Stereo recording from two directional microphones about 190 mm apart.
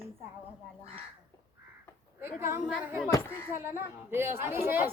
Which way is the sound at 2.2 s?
10° right (ahead or behind).